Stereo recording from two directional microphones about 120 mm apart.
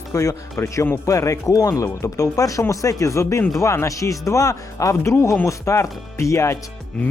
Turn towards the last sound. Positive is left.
turn(degrees=25)  # may be behind; listen again after turning